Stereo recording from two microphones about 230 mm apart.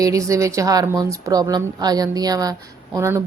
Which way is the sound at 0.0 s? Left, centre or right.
Centre.